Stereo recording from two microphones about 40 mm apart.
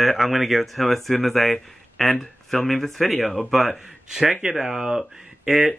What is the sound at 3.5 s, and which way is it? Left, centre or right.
Speech, centre.